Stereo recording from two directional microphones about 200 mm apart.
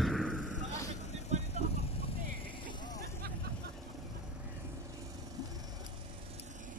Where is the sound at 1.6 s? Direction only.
35° right (ahead or behind).